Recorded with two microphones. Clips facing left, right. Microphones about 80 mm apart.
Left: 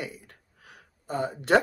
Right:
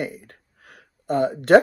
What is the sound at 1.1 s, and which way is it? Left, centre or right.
Speech, right.